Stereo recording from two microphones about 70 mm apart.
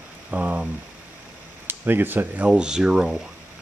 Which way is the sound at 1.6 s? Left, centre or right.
Right.